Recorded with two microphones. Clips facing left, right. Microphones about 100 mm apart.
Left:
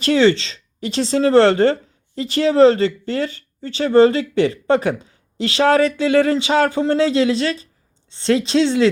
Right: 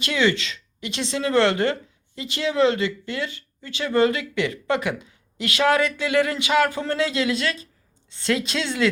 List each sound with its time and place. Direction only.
0.0 s speech: 35° left (ahead or behind)